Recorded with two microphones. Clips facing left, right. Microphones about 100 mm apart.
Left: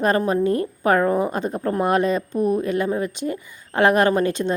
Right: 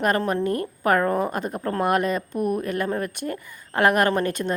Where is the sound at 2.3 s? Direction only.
10° right (ahead or behind).